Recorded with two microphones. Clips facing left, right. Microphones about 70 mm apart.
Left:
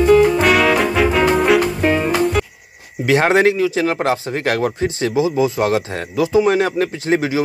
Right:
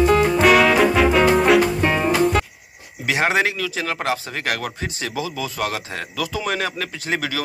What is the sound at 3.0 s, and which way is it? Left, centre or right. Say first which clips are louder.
Speech: left 6 dB; left.